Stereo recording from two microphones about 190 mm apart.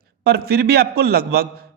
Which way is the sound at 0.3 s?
55° right (ahead or behind).